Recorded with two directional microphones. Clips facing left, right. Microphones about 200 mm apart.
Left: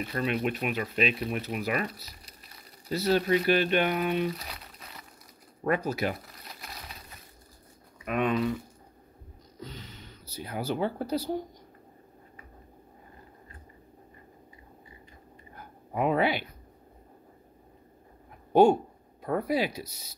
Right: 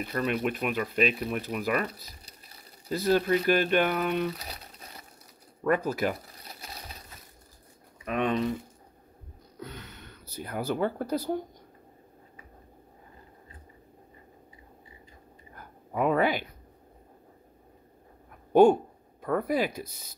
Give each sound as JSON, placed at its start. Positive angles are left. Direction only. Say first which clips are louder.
{"t": 0.0, "sound": "speech", "louder": "right 1 dB", "side_deg": -45}
{"t": 2.9, "sound": "speech", "louder": "right 1 dB", "side_deg": -45}
{"t": 8.0, "sound": "speech", "louder": "even", "side_deg": -35}
{"t": 9.6, "sound": "speech", "louder": "right 1 dB", "side_deg": -60}
{"t": 15.5, "sound": "a sound", "louder": "right 1 dB", "side_deg": -45}
{"t": 18.5, "sound": "speech", "louder": "right 1 dB", "side_deg": -50}